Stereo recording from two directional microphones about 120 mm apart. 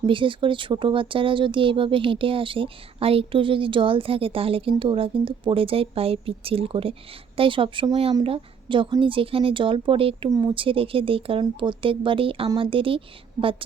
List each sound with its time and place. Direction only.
0.0 s speech: 45° right (ahead or behind)
10.2 s speech: 30° right (ahead or behind)
10.5 s speech: 45° right (ahead or behind)